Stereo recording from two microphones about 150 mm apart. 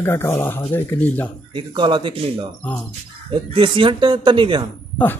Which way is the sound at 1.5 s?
30° right (ahead or behind).